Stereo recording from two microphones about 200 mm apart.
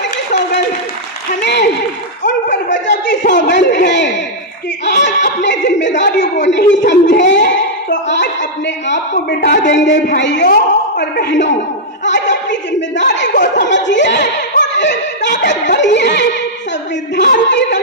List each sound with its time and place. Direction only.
1.4 s a man's voice: 55° left (ahead or behind)